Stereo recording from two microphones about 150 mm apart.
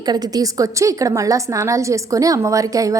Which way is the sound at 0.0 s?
25° right (ahead or behind).